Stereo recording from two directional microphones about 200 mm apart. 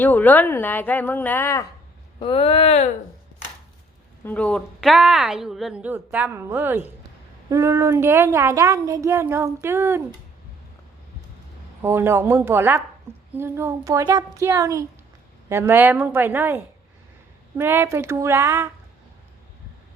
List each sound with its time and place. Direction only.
0.0 s a woman's voice: 10° left (ahead or behind)
2.2 s speech: 30° left (ahead or behind)
4.2 s a woman's voice: 10° left (ahead or behind); by 10.0 s 15° right (ahead or behind)
11.8 s a woman's voice: 10° right (ahead or behind)